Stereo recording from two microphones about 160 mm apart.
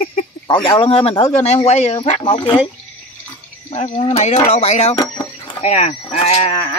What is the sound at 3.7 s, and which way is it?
Speech, 40° left (ahead or behind).